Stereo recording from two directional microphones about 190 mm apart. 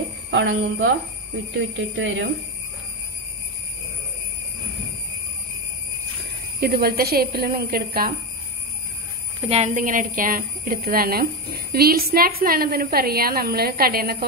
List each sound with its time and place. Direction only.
0.3 s speech: 85° right
2.0 s speech: 80° right
6.6 s a woman's voice: 55° right (ahead or behind)
9.5 s a woman's voice: 40° right (ahead or behind)